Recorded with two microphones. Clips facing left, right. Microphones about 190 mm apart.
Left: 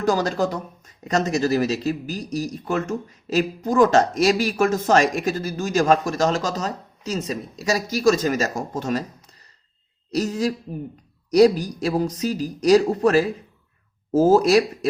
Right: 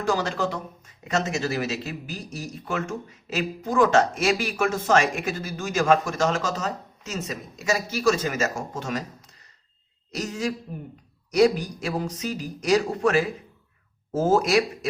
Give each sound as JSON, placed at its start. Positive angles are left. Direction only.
{"t": 0.0, "sound": "speech", "side_deg": 40}
{"t": 10.1, "sound": "speech", "side_deg": 35}